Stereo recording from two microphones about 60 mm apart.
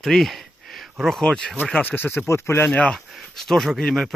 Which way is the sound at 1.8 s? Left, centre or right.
Left.